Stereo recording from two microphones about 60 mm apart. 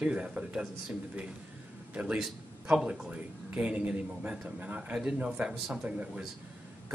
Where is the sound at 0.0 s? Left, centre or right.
Centre.